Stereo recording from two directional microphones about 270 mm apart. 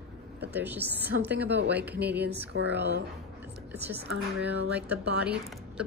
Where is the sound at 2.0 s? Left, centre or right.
Right.